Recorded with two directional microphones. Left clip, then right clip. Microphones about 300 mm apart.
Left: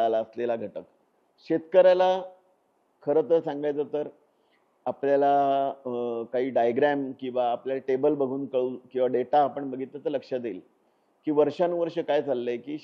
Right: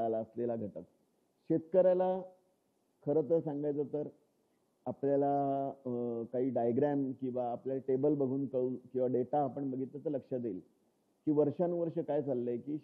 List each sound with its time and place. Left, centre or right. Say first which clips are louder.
0.0 s a man's voice: left 10 dB; centre
8.9 s a man's voice: left 10 dB; centre